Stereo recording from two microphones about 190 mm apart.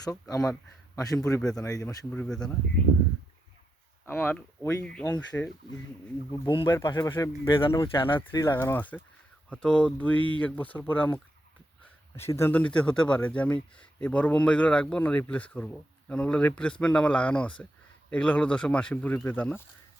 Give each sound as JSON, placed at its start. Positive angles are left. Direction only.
{"t": 0.0, "sound": "speech", "side_deg": 20}
{"t": 1.4, "sound": "speech", "side_deg": 5}
{"t": 1.6, "sound": "speech", "side_deg": 15}
{"t": 2.1, "sound": "speech", "side_deg": 5}
{"t": 4.0, "sound": "speech", "side_deg": 10}
{"t": 6.3, "sound": "speech", "side_deg": 20}